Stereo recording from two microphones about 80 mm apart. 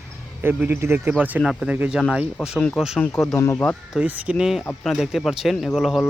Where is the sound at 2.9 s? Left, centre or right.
Centre.